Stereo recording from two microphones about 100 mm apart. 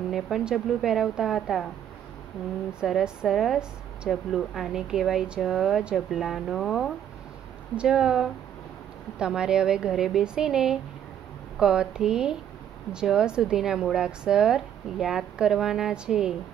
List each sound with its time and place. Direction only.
0.1 s a woman's voice: 5° right (ahead or behind)
2.8 s a woman's voice: 5° right (ahead or behind)
7.7 s a woman's voice: 10° right (ahead or behind)